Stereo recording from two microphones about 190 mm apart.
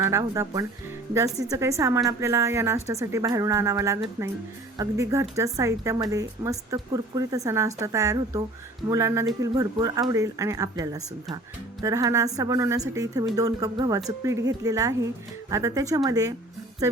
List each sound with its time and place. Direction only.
0.0 s a woman's voice: 15° right (ahead or behind)